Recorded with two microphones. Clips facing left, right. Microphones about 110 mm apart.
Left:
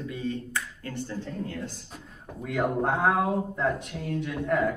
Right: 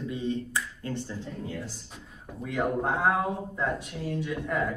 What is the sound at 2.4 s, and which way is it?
A man's voice, centre (ahead or behind).